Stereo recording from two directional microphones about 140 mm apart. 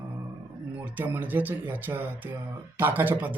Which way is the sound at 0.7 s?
10° right (ahead or behind).